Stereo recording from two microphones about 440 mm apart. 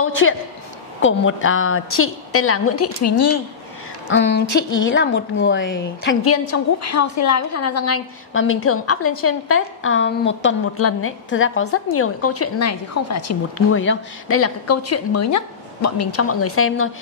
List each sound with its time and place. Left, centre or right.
0.0 s a woman's voice: left
4.1 s a woman's voice: left